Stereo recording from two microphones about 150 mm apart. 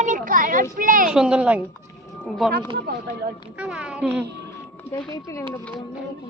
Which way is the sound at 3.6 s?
5° right (ahead or behind).